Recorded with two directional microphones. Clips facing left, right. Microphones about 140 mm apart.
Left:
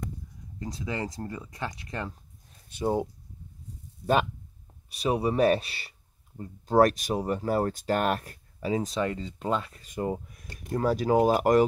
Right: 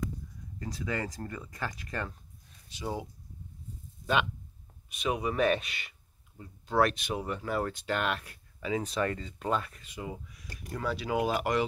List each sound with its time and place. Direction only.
0.7 s speech: 30° left (ahead or behind)
2.8 s speech: 50° left (ahead or behind); by 9.8 s 25° left (ahead or behind)
9.8 s speech: 45° left (ahead or behind)
10.4 s speech: 25° left (ahead or behind)
10.8 s speech: 40° left (ahead or behind)